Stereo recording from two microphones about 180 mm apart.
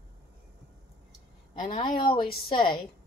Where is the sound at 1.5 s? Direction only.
30° left (ahead or behind).